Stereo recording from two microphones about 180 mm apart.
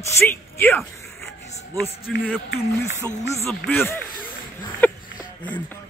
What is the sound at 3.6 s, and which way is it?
Speech, 10° left (ahead or behind).